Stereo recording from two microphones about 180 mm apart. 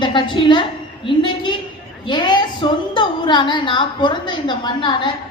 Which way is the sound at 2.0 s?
25° left (ahead or behind).